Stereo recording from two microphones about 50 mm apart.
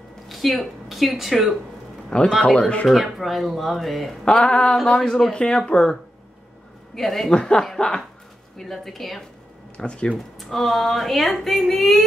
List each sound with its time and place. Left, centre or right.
0.3 s speech: centre
2.0 s speech: centre
2.9 s speech: centre
4.2 s a sound: centre
4.8 s speech: centre
7.0 s speech: centre
7.3 s speech: centre
9.8 s a sound: centre
10.1 s speech: centre